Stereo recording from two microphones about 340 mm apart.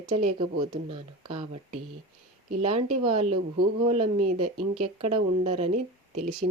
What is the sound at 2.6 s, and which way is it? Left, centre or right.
Speech, centre.